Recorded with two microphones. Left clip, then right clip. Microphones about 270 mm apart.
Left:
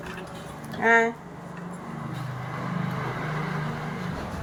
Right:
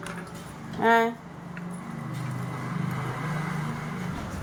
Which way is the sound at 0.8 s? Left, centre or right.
Centre.